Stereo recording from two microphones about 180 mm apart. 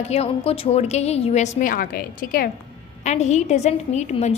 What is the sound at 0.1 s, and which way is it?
A woman's voice, 35° left (ahead or behind).